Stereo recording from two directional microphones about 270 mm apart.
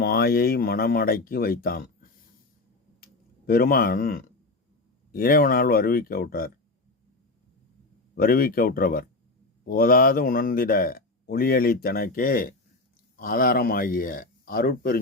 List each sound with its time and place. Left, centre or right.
0.0 s speech: left
3.0 s a sound: left
5.1 s speech: left
8.1 s speech: left